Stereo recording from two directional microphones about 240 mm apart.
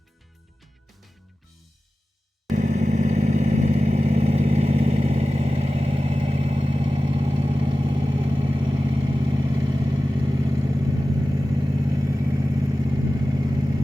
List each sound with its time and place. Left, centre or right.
2.5 s vehicle: right